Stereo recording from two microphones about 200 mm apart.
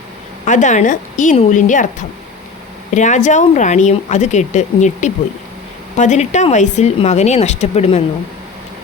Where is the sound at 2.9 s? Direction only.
35° left (ahead or behind).